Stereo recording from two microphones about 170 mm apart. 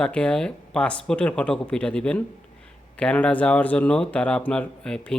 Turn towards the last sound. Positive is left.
turn(degrees=5)  # may be behind; listen again after turning